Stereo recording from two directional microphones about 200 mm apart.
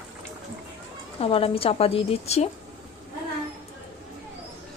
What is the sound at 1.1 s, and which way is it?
A woman's voice, 30° left (ahead or behind).